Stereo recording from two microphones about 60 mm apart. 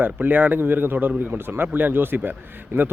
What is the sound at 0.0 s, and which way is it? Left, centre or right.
Speech, right.